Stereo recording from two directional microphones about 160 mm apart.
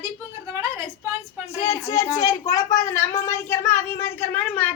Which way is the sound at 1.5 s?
20° left (ahead or behind).